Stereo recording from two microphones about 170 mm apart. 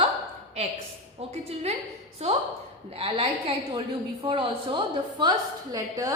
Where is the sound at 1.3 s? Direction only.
40° right (ahead or behind).